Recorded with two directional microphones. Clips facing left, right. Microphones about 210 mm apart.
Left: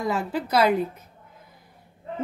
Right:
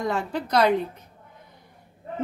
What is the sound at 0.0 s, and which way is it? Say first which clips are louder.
A woman's voice: left 1 dB; 5° left (ahead or behind).